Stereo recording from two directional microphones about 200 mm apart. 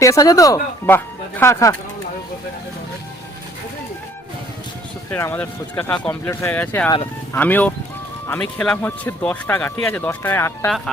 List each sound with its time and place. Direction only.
0.0 s speech: 15° left (ahead or behind)
5.1 s speech: 10° left (ahead or behind)